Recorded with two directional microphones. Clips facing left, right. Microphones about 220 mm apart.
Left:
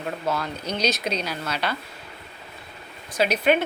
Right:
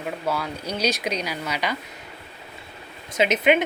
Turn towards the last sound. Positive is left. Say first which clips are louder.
# right 1 dB
turn(degrees=-20)  # may be behind; listen again after turning